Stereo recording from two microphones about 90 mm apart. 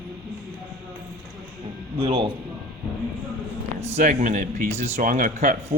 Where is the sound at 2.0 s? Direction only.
85° right.